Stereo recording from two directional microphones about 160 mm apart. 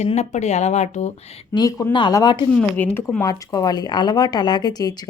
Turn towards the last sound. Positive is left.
turn(degrees=25)  # may be behind; listen again after turning